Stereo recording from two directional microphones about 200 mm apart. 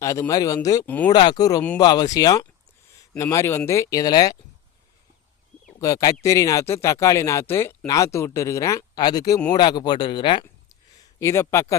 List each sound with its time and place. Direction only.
0.0 s speech: 15° left (ahead or behind)
1.1 s speech: 20° left (ahead or behind)
5.8 s speech: 15° left (ahead or behind)